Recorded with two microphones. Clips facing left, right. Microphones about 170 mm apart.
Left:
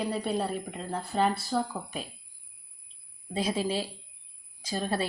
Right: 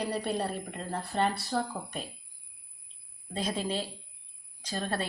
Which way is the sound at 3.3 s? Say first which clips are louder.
Left 3 dB; 10° left (ahead or behind).